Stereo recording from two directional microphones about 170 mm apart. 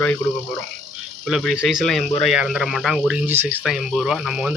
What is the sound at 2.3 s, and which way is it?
Speech, 5° right (ahead or behind).